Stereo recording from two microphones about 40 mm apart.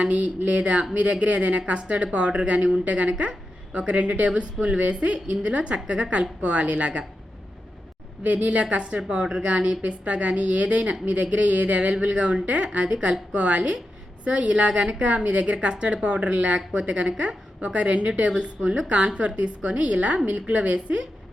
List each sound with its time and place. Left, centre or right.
0.0 s a woman's voice: right
8.3 s a woman's voice: right